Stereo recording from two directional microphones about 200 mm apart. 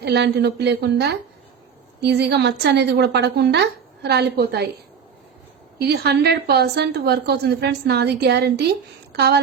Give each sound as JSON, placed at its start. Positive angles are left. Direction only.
{"t": 0.0, "sound": "a woman's voice", "side_deg": -55}
{"t": 5.8, "sound": "a woman's voice", "side_deg": -55}